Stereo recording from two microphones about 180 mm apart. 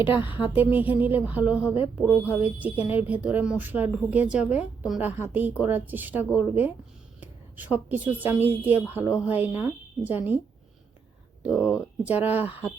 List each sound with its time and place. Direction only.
0.0 s a woman's voice: 25° left (ahead or behind)
0.5 s a woman's voice: 10° right (ahead or behind)
11.5 s speech: 15° left (ahead or behind)
12.0 s a woman's voice: 10° right (ahead or behind)